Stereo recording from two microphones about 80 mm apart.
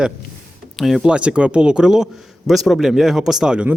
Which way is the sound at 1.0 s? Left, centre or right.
Centre.